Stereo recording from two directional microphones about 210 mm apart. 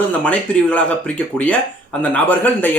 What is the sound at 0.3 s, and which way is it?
Speech, 5° left (ahead or behind).